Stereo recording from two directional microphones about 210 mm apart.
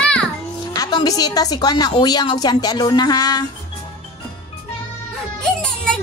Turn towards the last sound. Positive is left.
turn(degrees=5)  # may be behind; listen again after turning